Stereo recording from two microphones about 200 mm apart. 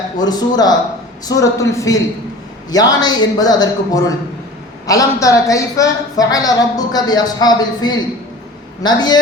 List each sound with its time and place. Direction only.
0.2 s a man's voice: 20° left (ahead or behind)